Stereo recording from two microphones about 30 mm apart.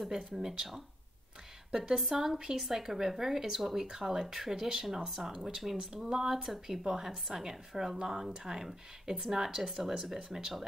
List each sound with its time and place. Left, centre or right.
0.1 s speech: centre
1.7 s speech: centre